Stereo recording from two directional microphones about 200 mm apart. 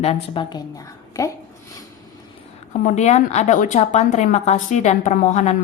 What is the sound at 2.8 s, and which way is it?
A woman's voice, 35° left (ahead or behind).